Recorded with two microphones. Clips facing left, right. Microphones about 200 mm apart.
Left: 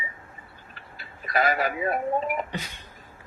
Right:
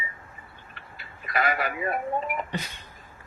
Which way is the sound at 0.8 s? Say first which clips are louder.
Left 2 dB; 40° left (ahead or behind).